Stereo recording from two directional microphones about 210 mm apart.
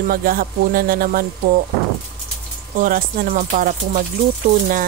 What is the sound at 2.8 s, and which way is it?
Speech, 45° right (ahead or behind).